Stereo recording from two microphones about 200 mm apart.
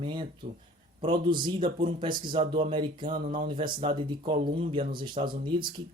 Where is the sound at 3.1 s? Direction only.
45° right (ahead or behind).